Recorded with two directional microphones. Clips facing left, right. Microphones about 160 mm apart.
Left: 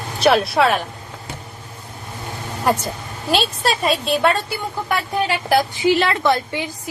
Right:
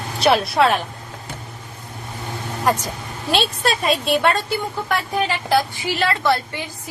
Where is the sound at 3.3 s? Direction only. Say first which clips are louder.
Left 1 dB; centre (ahead or behind).